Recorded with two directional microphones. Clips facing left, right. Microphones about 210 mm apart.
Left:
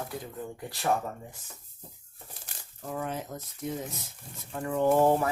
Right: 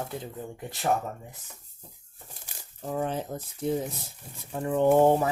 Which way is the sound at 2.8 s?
30° right (ahead or behind).